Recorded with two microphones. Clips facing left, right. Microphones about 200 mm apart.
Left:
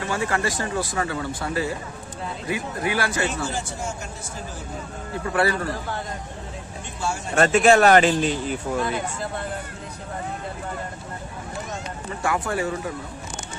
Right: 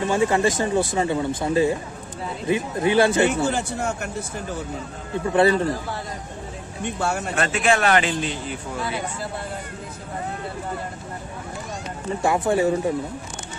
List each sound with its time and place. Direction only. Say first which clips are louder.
0.0 s speech: right 6 dB; 20° right (ahead or behind)
3.4 s speech: right 6 dB; 60° right (ahead or behind)
5.3 s speech: right 5 dB; 20° right (ahead or behind)
6.8 s speech: right 5 dB; 60° right (ahead or behind)
7.3 s a man's voice: left 7 dB; 40° left (ahead or behind)
12.2 s speech: right 5 dB; 25° right (ahead or behind)